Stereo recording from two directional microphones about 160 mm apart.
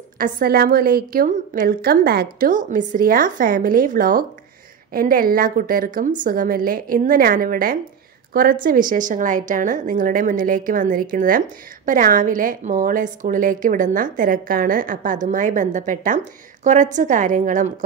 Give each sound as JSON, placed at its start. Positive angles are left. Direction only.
{"t": 0.2, "sound": "a woman's voice", "side_deg": -70}